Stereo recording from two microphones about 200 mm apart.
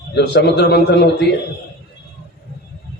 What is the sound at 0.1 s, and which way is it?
Speech, 55° left (ahead or behind).